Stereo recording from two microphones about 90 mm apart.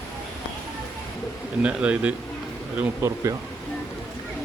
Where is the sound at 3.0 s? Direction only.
25° right (ahead or behind).